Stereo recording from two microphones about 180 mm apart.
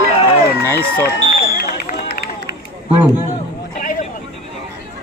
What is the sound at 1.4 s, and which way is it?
Run, 60° left (ahead or behind).